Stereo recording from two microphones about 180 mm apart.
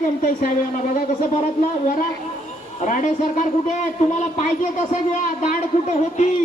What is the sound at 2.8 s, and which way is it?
A man's voice, 45° left (ahead or behind).